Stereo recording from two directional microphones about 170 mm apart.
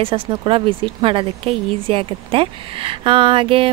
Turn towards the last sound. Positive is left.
turn(degrees=-30)  # may be behind; listen again after turning